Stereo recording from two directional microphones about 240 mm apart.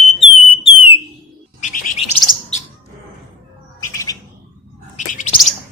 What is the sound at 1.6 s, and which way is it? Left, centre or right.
Bird, left.